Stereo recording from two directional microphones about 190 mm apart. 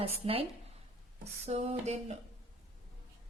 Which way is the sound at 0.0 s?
30° right (ahead or behind).